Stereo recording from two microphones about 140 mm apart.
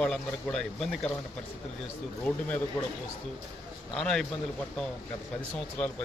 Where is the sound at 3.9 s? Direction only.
5° left (ahead or behind).